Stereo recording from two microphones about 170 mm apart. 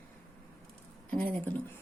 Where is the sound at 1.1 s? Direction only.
10° left (ahead or behind).